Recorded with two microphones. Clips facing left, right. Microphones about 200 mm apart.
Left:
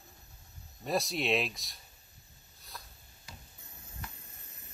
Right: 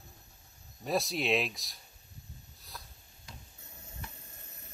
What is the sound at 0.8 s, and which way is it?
Speech, centre (ahead or behind).